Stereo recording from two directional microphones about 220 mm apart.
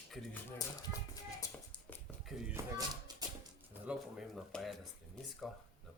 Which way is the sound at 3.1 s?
20° right (ahead or behind).